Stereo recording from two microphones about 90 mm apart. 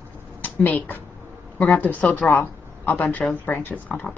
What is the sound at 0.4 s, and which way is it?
Speech, 20° left (ahead or behind).